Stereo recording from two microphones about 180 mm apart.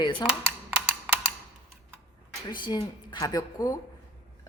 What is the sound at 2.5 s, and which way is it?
Speech, 25° left (ahead or behind).